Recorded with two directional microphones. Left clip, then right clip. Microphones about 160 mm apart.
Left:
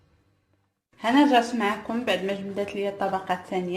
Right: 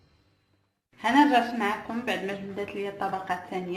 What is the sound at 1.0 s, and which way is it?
A woman's voice, 55° left (ahead or behind).